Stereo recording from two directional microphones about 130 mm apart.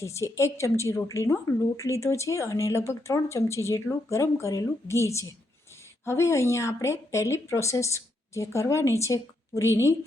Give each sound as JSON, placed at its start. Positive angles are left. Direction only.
{"t": 0.0, "sound": "a woman's voice", "side_deg": 20}